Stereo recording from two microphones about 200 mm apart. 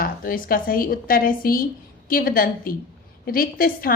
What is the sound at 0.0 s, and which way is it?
A woman's voice, 45° left (ahead or behind).